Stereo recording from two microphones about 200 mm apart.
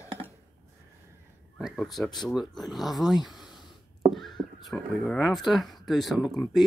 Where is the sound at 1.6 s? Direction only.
Centre (ahead or behind).